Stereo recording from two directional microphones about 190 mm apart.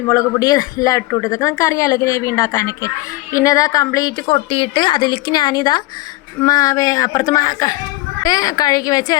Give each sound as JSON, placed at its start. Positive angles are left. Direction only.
{"t": 0.1, "sound": "a woman's voice", "side_deg": 15}